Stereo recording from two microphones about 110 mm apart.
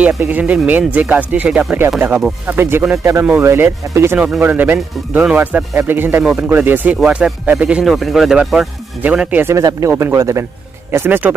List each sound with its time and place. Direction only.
0.2 s speech: 15° right (ahead or behind)
9.6 s speech: 30° right (ahead or behind); by 11.3 s 15° right (ahead or behind)